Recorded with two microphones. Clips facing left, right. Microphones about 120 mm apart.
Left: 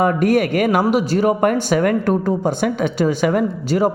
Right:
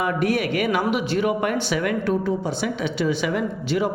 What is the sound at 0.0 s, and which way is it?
A man's voice, 45° left (ahead or behind).